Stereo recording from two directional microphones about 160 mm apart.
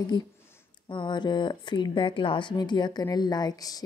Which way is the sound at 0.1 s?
30° left (ahead or behind).